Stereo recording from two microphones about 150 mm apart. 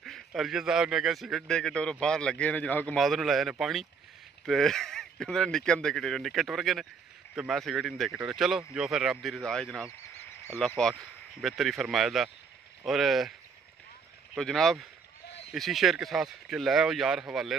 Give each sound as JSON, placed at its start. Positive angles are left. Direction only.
{"t": 0.0, "sound": "speech", "side_deg": 0}
{"t": 14.3, "sound": "speech", "side_deg": 0}